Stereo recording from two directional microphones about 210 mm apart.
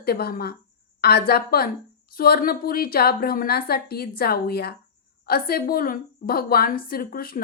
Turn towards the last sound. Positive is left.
turn(degrees=45)  # may be behind; listen again after turning